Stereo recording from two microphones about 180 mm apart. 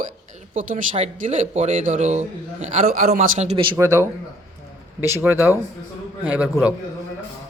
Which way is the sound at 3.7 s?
15° right (ahead or behind).